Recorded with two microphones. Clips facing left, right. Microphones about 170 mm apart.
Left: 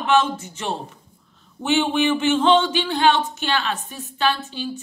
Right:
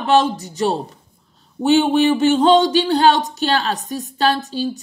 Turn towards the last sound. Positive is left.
turn(degrees=-40)  # may be behind; listen again after turning